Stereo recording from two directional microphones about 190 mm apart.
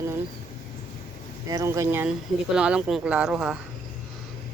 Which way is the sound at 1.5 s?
15° right (ahead or behind).